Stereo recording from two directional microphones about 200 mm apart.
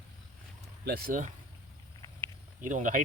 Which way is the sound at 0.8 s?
50° right (ahead or behind).